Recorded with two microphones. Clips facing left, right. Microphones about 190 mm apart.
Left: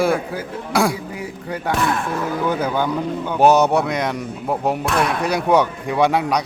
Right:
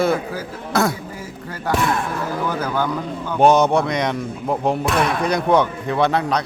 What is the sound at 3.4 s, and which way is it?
A man's voice, 5° left (ahead or behind).